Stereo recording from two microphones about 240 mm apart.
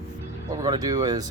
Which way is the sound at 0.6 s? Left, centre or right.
Centre.